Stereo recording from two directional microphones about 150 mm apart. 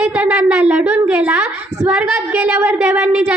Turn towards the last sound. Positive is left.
turn(degrees=-10)  # may be behind; listen again after turning